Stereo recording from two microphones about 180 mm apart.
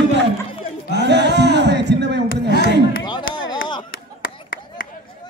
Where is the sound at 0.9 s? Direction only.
70° right (ahead or behind).